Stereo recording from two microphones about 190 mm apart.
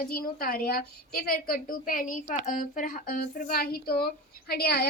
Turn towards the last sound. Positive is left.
turn(degrees=55)  # may be behind; listen again after turning